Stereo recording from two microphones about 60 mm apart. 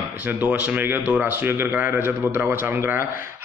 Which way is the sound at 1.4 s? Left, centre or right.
Right.